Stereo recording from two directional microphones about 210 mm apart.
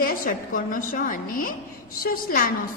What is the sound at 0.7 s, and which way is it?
Speech, 40° left (ahead or behind).